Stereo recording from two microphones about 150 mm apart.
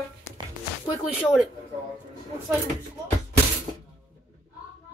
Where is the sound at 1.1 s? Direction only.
10° right (ahead or behind).